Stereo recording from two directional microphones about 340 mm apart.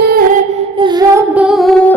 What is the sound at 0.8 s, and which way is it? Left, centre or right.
Child singing, centre.